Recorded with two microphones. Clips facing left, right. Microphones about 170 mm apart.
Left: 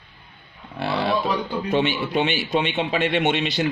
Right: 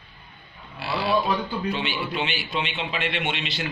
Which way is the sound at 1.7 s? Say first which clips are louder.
Left 7 dB; 45° left (ahead or behind).